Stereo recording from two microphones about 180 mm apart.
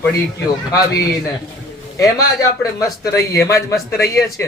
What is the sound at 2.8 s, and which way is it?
Speech, 15° left (ahead or behind).